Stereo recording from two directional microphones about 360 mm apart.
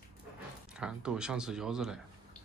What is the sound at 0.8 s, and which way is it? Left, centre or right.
Speech, centre.